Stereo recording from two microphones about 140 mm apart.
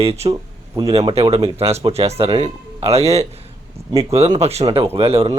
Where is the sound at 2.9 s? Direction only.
50° right (ahead or behind).